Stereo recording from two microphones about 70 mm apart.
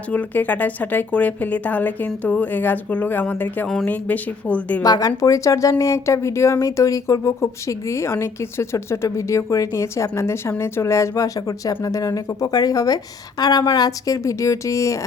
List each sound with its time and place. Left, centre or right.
0.1 s a woman's voice: left
4.8 s speech: left